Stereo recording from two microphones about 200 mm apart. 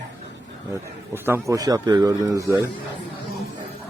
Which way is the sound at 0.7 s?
10° right (ahead or behind).